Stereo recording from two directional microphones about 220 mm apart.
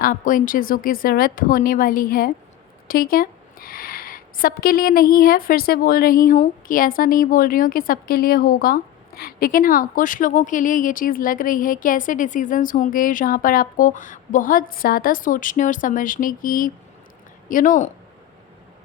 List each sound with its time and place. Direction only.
0.0 s speech: 40° left (ahead or behind)